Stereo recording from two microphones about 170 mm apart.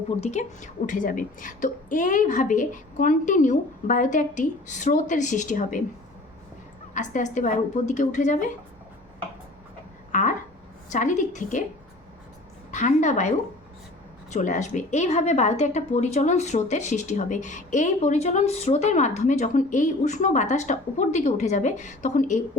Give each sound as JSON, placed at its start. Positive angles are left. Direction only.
{"t": 0.2, "sound": "a woman's voice", "side_deg": 40}
{"t": 6.9, "sound": "a woman's voice", "side_deg": 45}
{"t": 10.1, "sound": "a sound", "side_deg": 50}
{"t": 10.9, "sound": "a woman's voice", "side_deg": 45}
{"t": 12.7, "sound": "a woman's voice", "side_deg": 45}